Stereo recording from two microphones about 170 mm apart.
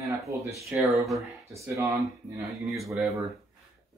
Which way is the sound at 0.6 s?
Centre (ahead or behind).